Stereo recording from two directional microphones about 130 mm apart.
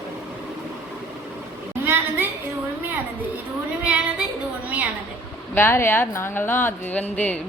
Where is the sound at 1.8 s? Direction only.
15° right (ahead or behind).